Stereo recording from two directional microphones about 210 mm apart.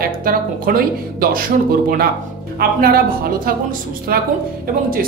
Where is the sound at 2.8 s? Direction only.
45° right (ahead or behind).